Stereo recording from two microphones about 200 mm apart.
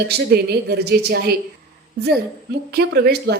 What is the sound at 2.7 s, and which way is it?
Speech, 50° right (ahead or behind).